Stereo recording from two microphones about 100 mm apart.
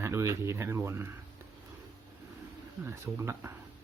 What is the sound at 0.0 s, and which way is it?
Speech, 30° right (ahead or behind).